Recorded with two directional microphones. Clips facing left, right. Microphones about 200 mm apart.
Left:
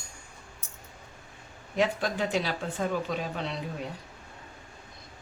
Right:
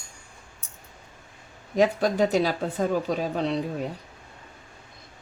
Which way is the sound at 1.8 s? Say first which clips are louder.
Right 6 dB; 40° right (ahead or behind).